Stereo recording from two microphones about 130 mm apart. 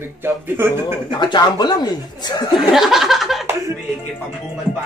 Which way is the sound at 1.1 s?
35° left (ahead or behind).